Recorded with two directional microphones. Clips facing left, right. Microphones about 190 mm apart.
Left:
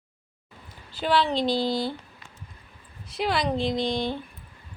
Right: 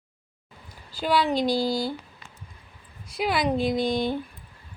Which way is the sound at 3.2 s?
5° right (ahead or behind).